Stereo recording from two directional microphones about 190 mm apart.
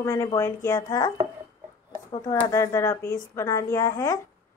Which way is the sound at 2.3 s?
15° left (ahead or behind).